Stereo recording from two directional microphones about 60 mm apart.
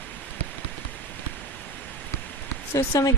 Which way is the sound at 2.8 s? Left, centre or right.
Left.